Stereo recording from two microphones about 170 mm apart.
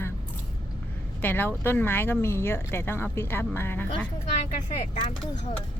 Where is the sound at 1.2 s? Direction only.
10° left (ahead or behind).